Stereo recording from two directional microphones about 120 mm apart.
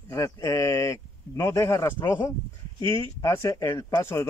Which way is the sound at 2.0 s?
25° left (ahead or behind).